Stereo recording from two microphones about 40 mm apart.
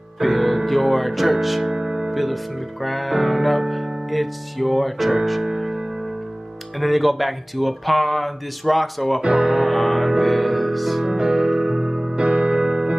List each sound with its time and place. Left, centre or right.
0.2 s music: centre
2.8 s music: centre
6.8 s music: centre
9.2 s speech: centre
9.6 s music: centre
11.1 s electric piano: centre